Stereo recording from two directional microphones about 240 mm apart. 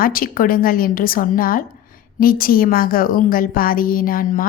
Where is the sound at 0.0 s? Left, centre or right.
Left.